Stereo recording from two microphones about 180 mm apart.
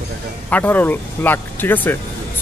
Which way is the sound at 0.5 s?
10° left (ahead or behind).